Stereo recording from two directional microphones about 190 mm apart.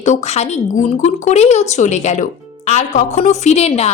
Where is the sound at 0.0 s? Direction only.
40° left (ahead or behind).